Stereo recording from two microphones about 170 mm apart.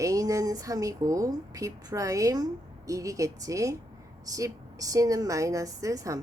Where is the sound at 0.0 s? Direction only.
20° right (ahead or behind).